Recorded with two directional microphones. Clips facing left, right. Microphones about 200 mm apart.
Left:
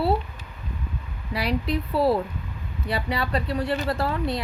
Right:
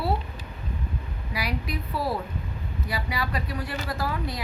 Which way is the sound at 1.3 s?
30° left (ahead or behind).